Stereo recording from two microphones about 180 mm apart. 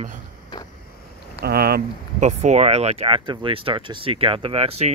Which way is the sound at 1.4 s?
60° right (ahead or behind).